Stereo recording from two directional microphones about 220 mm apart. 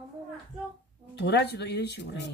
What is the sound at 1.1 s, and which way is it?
Speech, 50° left (ahead or behind).